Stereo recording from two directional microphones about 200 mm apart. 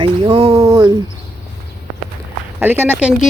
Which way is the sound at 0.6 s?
15° right (ahead or behind).